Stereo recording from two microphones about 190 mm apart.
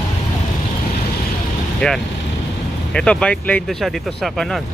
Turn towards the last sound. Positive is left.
turn(degrees=0)  # may be behind; listen again after turning